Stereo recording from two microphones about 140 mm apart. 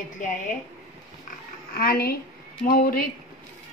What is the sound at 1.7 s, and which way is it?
A woman's voice, 90° left.